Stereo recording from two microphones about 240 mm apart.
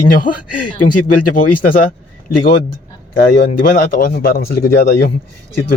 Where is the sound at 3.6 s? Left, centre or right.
Left.